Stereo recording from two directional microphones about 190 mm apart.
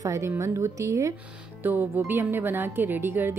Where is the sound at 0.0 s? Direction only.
15° right (ahead or behind).